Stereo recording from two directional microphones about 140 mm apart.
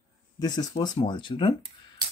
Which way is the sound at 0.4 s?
30° left (ahead or behind).